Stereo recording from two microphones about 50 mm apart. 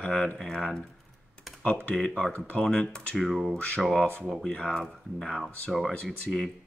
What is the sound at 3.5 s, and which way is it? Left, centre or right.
Speech, left.